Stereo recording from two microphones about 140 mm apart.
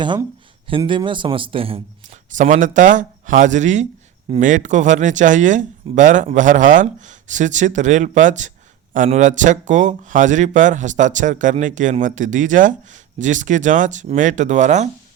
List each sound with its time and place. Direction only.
0.9 s speech: 35° right (ahead or behind)
2.0 s speech: 60° right (ahead or behind)